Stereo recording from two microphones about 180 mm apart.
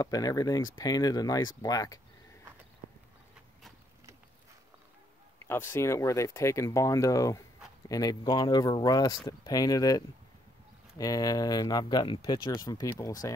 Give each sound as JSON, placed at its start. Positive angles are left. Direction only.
{"t": 0.0, "sound": "speech", "side_deg": 20}
{"t": 5.5, "sound": "speech", "side_deg": 15}